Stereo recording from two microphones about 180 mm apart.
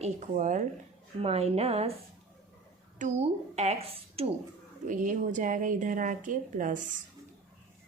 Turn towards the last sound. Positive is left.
turn(degrees=-45)  # may be behind; listen again after turning